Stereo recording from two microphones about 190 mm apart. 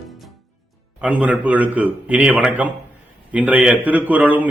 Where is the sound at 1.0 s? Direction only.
5° right (ahead or behind).